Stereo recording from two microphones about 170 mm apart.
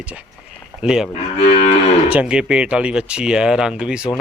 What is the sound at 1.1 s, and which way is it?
Moo, 40° left (ahead or behind).